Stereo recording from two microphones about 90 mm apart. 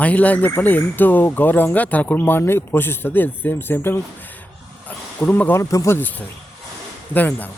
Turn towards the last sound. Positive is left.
turn(degrees=20)  # may be behind; listen again after turning